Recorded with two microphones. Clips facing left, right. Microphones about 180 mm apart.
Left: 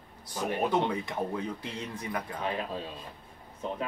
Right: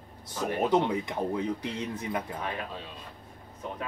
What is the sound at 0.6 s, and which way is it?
Speech, 20° right (ahead or behind).